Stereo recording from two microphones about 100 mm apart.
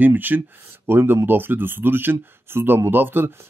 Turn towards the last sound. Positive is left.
turn(degrees=-20)  # may be behind; listen again after turning